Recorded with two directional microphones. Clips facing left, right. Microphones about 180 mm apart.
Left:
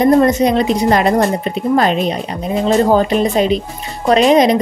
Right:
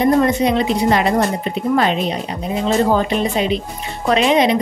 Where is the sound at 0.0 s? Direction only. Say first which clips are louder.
Left 4 dB; 45° left (ahead or behind).